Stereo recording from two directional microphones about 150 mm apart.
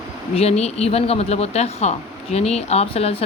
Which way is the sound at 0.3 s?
45° left (ahead or behind).